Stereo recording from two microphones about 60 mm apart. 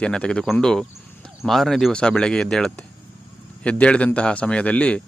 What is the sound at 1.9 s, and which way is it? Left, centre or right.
Speech, centre.